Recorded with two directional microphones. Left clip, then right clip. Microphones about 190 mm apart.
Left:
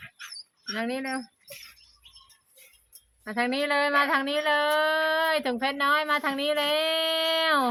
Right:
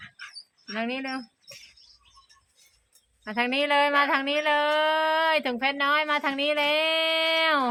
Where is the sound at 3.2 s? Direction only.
5° right (ahead or behind).